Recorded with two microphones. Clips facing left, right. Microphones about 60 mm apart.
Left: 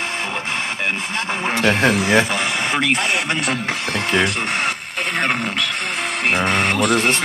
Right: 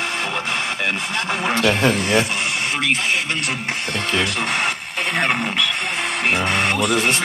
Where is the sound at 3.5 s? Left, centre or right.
Left.